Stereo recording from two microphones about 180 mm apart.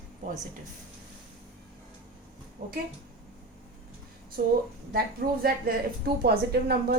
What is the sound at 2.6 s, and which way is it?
Speech, 45° right (ahead or behind).